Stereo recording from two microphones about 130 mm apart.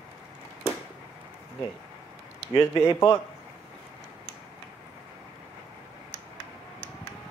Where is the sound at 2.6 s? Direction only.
20° left (ahead or behind).